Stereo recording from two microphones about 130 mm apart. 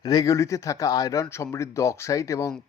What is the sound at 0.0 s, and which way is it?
Speech, 30° left (ahead or behind).